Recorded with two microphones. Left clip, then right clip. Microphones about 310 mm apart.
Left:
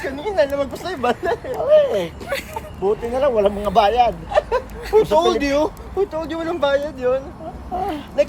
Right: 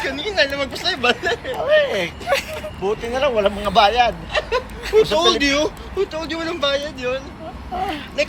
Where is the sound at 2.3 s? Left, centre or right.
Centre.